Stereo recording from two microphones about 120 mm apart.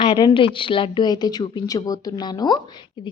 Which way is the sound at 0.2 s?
40° left (ahead or behind).